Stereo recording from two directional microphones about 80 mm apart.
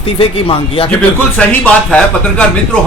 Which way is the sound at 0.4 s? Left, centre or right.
Left.